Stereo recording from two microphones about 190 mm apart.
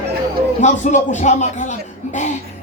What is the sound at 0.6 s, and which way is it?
A man's voice, 40° left (ahead or behind).